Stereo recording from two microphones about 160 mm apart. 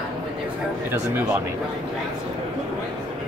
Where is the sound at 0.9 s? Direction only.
15° right (ahead or behind).